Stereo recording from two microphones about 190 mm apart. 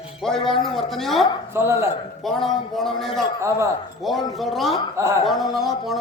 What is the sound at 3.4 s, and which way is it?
Speech, 15° right (ahead or behind).